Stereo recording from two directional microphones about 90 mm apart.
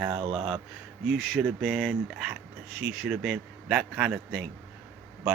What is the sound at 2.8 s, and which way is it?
A man's voice, 10° right (ahead or behind).